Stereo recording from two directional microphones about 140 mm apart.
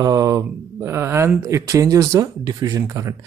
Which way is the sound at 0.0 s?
25° right (ahead or behind).